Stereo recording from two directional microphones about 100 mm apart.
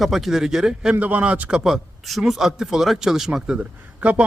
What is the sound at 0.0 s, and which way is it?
A man's voice, centre (ahead or behind).